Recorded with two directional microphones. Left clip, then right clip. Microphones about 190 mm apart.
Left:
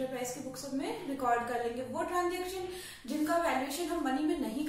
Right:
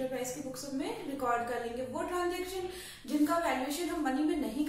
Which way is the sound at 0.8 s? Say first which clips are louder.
Left 2 dB; 15° right (ahead or behind).